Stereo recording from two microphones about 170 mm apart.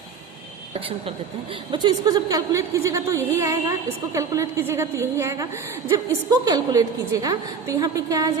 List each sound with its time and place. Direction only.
0.7 s a woman's voice: 35° right (ahead or behind)